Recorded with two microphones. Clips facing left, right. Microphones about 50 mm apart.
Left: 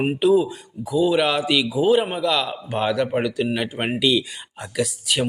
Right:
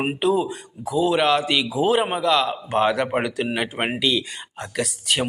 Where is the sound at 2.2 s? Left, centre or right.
Centre.